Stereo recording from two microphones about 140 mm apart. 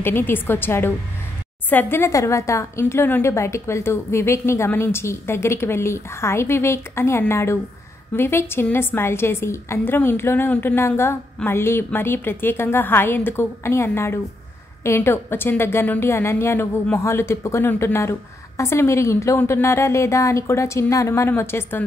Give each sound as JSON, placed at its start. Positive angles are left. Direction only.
{"t": 0.0, "sound": "a woman's voice", "side_deg": 15}